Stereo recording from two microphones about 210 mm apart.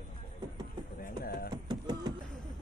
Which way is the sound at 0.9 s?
45° left (ahead or behind).